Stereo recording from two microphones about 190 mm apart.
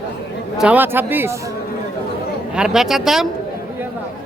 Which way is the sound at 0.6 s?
10° right (ahead or behind).